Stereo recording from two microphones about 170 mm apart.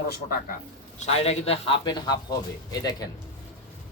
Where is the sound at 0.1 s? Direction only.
60° left (ahead or behind).